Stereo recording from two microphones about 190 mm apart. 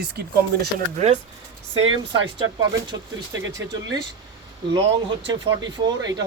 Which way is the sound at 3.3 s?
70° right (ahead or behind).